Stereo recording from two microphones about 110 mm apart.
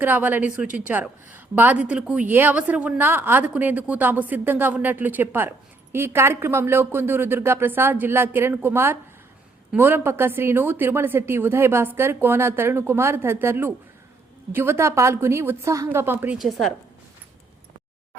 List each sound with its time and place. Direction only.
0.0 s a woman's voice: 15° right (ahead or behind)
16.4 s a woman's voice: centre (ahead or behind)